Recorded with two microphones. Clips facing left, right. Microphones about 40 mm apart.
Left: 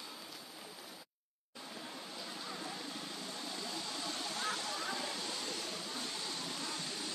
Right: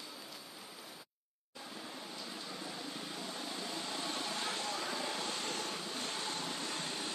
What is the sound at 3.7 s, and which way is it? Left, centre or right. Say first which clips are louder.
Vehicle: right 3 dB; right.